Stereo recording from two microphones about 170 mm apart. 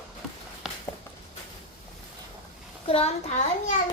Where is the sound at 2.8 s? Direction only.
35° left (ahead or behind).